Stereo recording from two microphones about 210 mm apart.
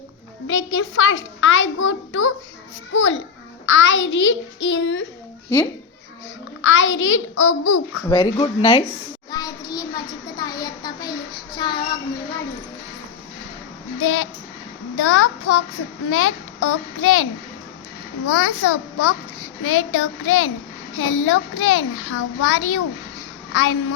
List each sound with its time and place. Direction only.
0.4 s a child's voice: 65° left (ahead or behind)
5.5 s a child's voice: 15° left (ahead or behind)
6.6 s a child's voice: 65° left (ahead or behind)
8.1 s speech: 20° left (ahead or behind)
9.3 s child singing: 20° left (ahead or behind)
14.0 s a child's voice: 75° left (ahead or behind)
18.3 s a child's voice: 90° left